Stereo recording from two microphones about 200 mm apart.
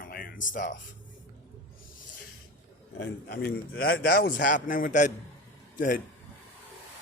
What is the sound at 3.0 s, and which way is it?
Speech, 50° left (ahead or behind).